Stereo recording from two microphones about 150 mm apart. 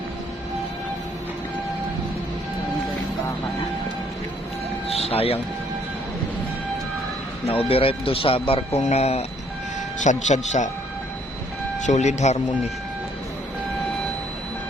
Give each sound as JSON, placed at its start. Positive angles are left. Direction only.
{"t": 4.9, "sound": "a sound", "side_deg": 40}
{"t": 7.4, "sound": "speech", "side_deg": 40}
{"t": 11.8, "sound": "speech", "side_deg": 50}